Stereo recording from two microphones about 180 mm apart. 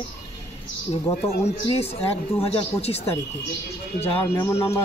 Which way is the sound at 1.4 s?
35° left (ahead or behind).